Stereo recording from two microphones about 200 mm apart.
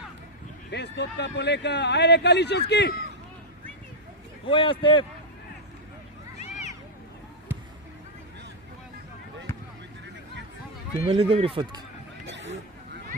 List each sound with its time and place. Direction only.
0.7 s a man's voice: 60° left (ahead or behind)
4.4 s speech: 25° left (ahead or behind)
11.1 s speech: 30° right (ahead or behind)
12.2 s a sound: 65° right (ahead or behind)